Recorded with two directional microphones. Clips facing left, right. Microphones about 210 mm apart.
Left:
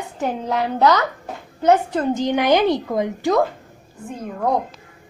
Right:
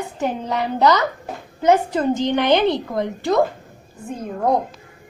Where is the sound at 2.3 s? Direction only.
10° left (ahead or behind).